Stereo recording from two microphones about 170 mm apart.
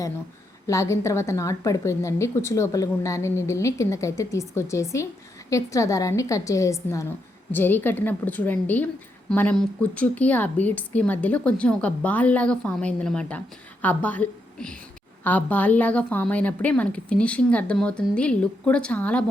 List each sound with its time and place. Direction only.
0.7 s a woman's voice: 20° left (ahead or behind)